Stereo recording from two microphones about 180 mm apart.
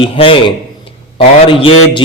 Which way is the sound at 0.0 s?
30° left (ahead or behind).